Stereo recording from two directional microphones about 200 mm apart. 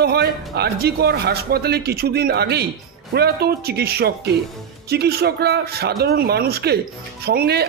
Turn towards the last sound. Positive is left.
turn(degrees=-50)  # may be behind; listen again after turning